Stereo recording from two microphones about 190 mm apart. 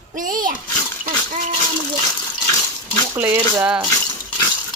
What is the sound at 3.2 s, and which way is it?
Speech, 10° right (ahead or behind).